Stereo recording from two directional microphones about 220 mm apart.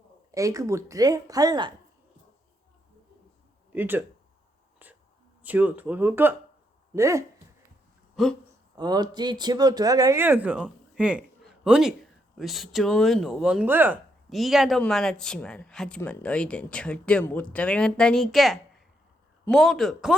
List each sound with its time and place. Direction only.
0.3 s speech: 15° right (ahead or behind)
3.7 s speech: 10° right (ahead or behind)
5.4 s speech: 5° right (ahead or behind)
8.1 s speech: centre (ahead or behind)
8.7 s speech: 20° right (ahead or behind); by 20.1 s centre (ahead or behind)